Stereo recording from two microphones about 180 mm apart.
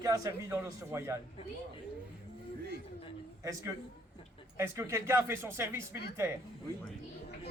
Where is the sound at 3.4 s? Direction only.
20° right (ahead or behind).